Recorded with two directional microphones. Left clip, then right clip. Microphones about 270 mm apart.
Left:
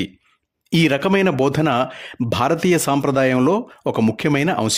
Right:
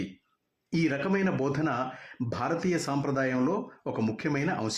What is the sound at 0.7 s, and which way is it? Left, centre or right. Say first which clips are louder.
Speech: left 11 dB; left.